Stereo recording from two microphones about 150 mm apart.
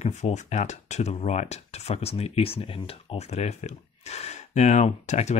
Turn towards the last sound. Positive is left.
turn(degrees=50)  # may be behind; listen again after turning